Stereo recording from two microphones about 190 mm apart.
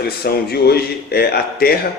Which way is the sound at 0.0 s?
55° left (ahead or behind).